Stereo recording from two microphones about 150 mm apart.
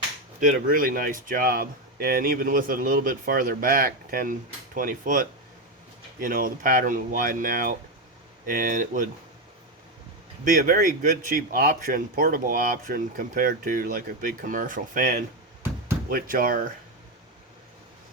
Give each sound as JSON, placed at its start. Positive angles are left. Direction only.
{"t": 0.3, "sound": "speech", "side_deg": -65}
{"t": 10.4, "sound": "speech", "side_deg": -65}